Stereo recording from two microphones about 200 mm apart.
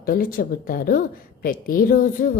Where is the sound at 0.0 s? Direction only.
45° left (ahead or behind).